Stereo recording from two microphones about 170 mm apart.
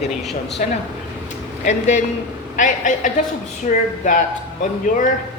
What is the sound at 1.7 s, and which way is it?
A man's voice, 45° left (ahead or behind).